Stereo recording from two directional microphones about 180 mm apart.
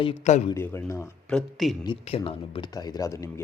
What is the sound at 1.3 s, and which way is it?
Speech, centre (ahead or behind).